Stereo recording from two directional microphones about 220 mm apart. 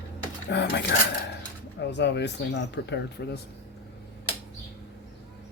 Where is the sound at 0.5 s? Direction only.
50° left (ahead or behind).